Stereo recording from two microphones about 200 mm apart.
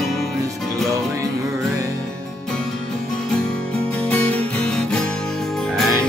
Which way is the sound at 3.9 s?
5° left (ahead or behind).